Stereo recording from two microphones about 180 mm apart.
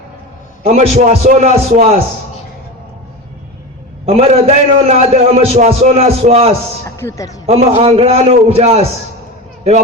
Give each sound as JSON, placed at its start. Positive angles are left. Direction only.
{"t": 0.6, "sound": "a man's voice", "side_deg": -35}
{"t": 4.0, "sound": "a man's voice", "side_deg": -35}
{"t": 6.8, "sound": "a man's voice", "side_deg": 15}
{"t": 7.4, "sound": "a man's voice", "side_deg": -35}